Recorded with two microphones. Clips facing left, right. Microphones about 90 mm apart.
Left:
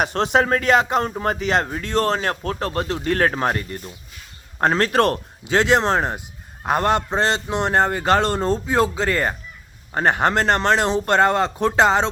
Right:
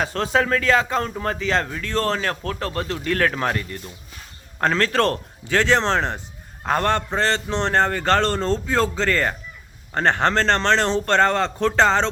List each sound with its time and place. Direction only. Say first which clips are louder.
0.0 s speech: left 2 dB; 25° left (ahead or behind)